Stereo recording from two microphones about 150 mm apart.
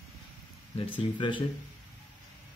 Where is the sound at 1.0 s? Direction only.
35° left (ahead or behind).